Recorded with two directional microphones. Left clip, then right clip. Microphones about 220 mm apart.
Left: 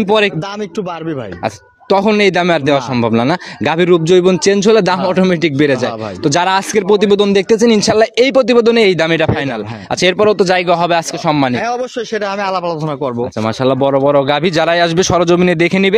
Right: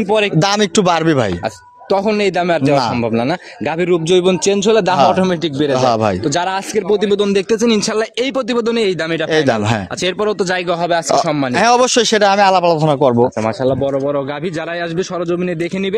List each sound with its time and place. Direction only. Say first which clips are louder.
1.9 s a man's voice: left 4 dB; 25° left (ahead or behind)
10.0 s a man's voice: left 7 dB; 25° left (ahead or behind)
11.6 s speech: right 7 dB; 50° right (ahead or behind)
13.7 s a man's voice: left 7 dB; 35° left (ahead or behind)